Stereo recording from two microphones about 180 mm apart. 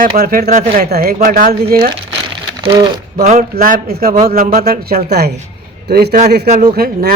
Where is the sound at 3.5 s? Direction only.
55° right (ahead or behind).